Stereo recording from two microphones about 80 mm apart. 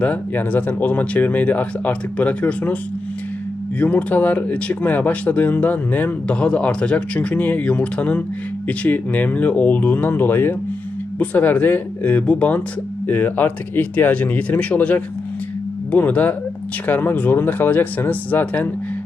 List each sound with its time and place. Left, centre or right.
0.0 s speech: left
3.8 s speech: left